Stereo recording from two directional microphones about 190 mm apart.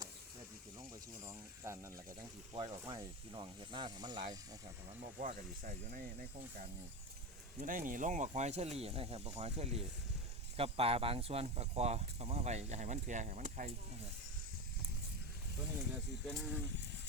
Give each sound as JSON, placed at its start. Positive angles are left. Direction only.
{"t": 1.2, "sound": "speech", "side_deg": -15}
{"t": 5.2, "sound": "speech", "side_deg": -45}
{"t": 7.6, "sound": "speech", "side_deg": -45}
{"t": 16.2, "sound": "speech", "side_deg": 5}